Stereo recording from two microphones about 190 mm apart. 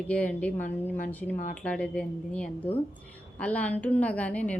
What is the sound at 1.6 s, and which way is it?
A woman's voice, 5° left (ahead or behind).